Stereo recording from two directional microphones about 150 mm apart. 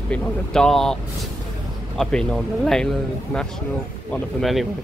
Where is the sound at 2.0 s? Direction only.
5° left (ahead or behind).